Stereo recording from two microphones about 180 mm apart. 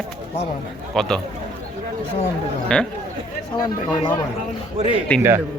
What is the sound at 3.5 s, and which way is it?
Speech, 25° left (ahead or behind).